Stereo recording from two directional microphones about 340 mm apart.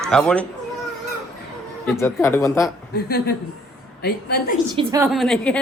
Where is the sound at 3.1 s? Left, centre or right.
Left.